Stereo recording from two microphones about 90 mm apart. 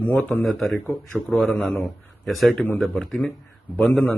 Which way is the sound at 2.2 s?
Centre (ahead or behind).